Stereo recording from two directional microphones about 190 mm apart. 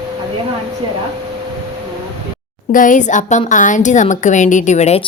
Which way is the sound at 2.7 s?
45° left (ahead or behind).